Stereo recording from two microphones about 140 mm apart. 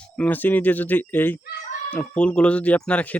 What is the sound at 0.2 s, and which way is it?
Speech, 15° left (ahead or behind).